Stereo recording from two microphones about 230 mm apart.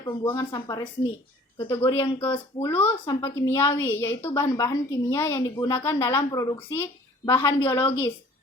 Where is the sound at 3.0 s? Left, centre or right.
Left.